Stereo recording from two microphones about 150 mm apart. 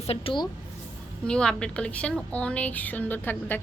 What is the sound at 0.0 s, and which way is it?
Speech, 40° left (ahead or behind).